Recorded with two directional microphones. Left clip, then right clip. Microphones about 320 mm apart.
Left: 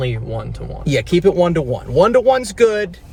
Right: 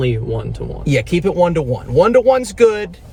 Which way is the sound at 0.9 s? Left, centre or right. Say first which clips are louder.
Left 2 dB; centre.